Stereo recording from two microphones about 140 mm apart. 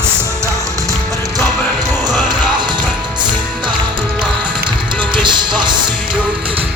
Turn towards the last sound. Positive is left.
turn(degrees=-35)  # may be behind; listen again after turning